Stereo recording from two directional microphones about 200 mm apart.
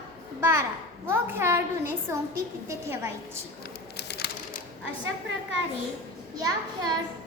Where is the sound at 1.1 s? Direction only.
10° right (ahead or behind).